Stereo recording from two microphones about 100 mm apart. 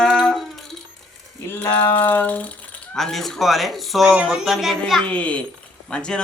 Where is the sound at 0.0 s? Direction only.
Centre (ahead or behind).